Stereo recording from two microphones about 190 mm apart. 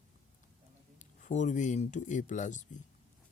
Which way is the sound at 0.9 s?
40° left (ahead or behind).